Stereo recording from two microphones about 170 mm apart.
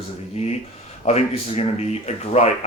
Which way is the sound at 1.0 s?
40° left (ahead or behind).